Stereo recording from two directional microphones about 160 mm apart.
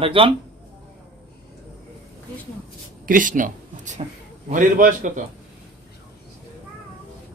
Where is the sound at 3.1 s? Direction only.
55° right (ahead or behind).